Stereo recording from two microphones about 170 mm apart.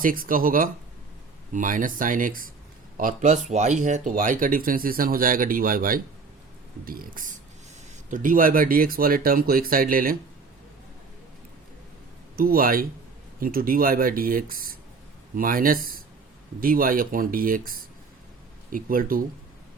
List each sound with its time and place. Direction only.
0.0 s speech: 55° right (ahead or behind)
12.4 s speech: 60° right (ahead or behind)